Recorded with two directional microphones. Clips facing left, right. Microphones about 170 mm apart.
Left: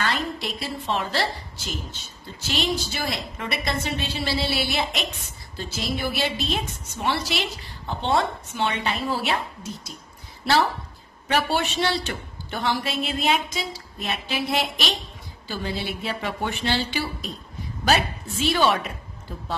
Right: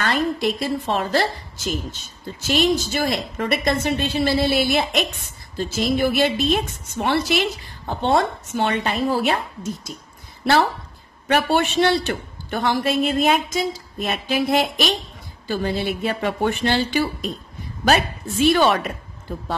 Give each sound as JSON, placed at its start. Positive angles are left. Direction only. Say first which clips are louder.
{"t": 0.0, "sound": "a woman's voice", "louder": "right 6 dB", "side_deg": -50}
{"t": 11.2, "sound": "a woman's voice", "louder": "right 5 dB", "side_deg": -55}